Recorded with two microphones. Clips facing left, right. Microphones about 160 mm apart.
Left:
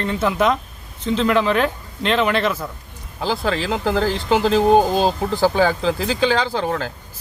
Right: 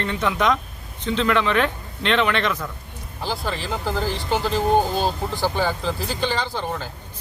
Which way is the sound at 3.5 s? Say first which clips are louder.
Left 7 dB; 90° left.